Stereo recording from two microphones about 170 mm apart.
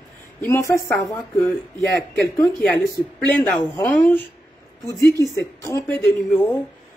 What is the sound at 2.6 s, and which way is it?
Speech, 5° left (ahead or behind).